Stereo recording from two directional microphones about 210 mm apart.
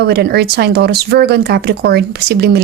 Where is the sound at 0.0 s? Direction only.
50° right (ahead or behind).